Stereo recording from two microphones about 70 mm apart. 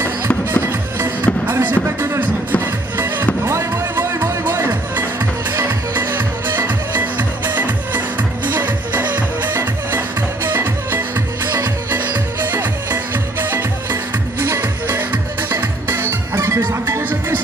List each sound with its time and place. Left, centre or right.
0.5 s music: right